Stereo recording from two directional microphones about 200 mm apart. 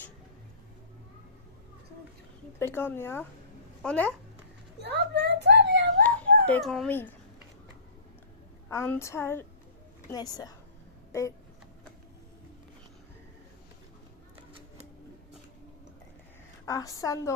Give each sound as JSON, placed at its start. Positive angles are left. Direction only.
{"t": 2.6, "sound": "a woman's voice", "side_deg": 10}
{"t": 4.8, "sound": "a sound", "side_deg": -60}
{"t": 6.0, "sound": "dog", "side_deg": 5}
{"t": 8.7, "sound": "a woman's voice", "side_deg": 15}
{"t": 16.6, "sound": "a woman's voice", "side_deg": 15}